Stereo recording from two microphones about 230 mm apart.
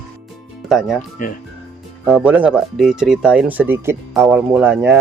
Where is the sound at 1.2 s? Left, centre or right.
Left.